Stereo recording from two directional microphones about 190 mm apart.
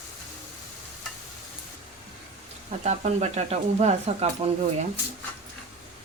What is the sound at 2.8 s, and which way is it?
Speech, 35° right (ahead or behind).